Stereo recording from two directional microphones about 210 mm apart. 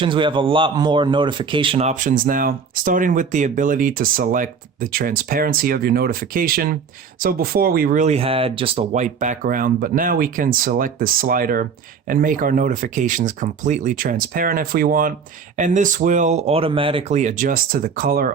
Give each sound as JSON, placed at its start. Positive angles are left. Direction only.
{"t": 0.0, "sound": "a man's voice", "side_deg": -25}